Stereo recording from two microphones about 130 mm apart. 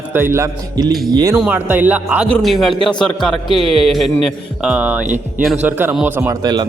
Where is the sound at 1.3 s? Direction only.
10° right (ahead or behind).